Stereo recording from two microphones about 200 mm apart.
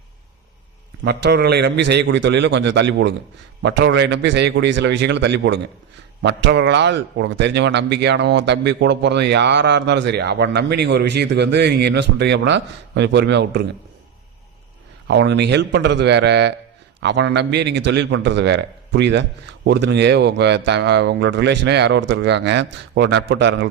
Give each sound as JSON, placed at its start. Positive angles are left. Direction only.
{"t": 1.0, "sound": "a man's voice", "side_deg": -55}
{"t": 15.0, "sound": "a man's voice", "side_deg": -60}